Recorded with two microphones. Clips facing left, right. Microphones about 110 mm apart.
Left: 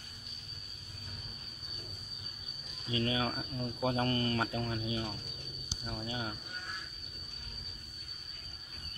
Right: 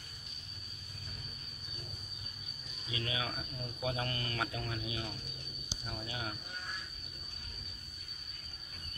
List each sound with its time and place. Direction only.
2.9 s speech: 40° left (ahead or behind)